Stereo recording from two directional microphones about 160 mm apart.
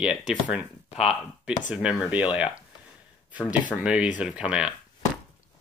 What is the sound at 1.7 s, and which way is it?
Speech, 5° right (ahead or behind).